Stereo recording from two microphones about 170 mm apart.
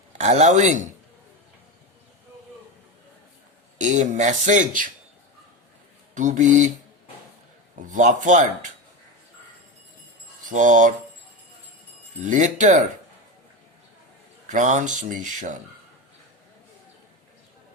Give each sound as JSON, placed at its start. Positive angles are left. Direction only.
{"t": 0.2, "sound": "speech", "side_deg": -45}
{"t": 3.8, "sound": "speech", "side_deg": -45}
{"t": 6.1, "sound": "speech", "side_deg": -45}
{"t": 7.8, "sound": "speech", "side_deg": -45}
{"t": 10.4, "sound": "speech", "side_deg": -50}
{"t": 12.2, "sound": "speech", "side_deg": -45}
{"t": 14.4, "sound": "speech", "side_deg": -45}